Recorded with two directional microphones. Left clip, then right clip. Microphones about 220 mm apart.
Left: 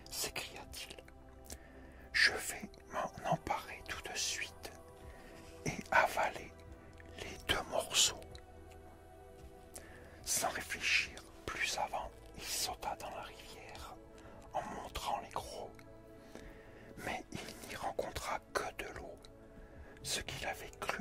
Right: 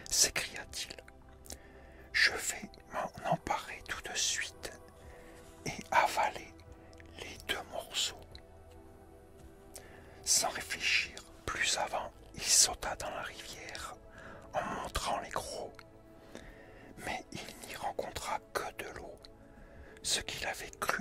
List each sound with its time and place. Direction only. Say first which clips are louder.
0.0 s whispering: right 10 dB; 35° right (ahead or behind)
2.1 s whispering: right 2 dB; centre (ahead or behind); by 4.7 s 25° right (ahead or behind)
5.6 s music: right 2 dB; 20° left (ahead or behind)
7.2 s music: left 1 dB; 25° left (ahead or behind)
7.7 s whispering: left 4 dB; 45° left (ahead or behind)
10.2 s whispering: right 5 dB; 10° left (ahead or behind)
11.4 s whispering: right 4 dB; 20° right (ahead or behind); by 15.7 s 45° right (ahead or behind)
17.0 s whispering: right 2 dB; 10° left (ahead or behind)